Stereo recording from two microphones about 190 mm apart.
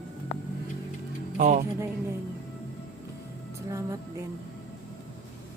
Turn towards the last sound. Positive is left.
turn(degrees=-15)  # may be behind; listen again after turning